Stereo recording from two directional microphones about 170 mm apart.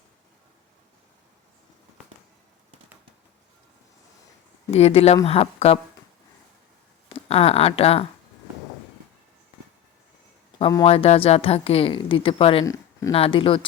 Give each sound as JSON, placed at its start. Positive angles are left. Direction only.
{"t": 4.7, "sound": "a woman's voice", "side_deg": 35}
{"t": 7.1, "sound": "speech", "side_deg": 35}
{"t": 10.6, "sound": "speech", "side_deg": 25}
{"t": 10.8, "sound": "a woman's voice", "side_deg": 35}
{"t": 12.6, "sound": "a sound", "side_deg": 20}
{"t": 13.1, "sound": "a woman's voice", "side_deg": 35}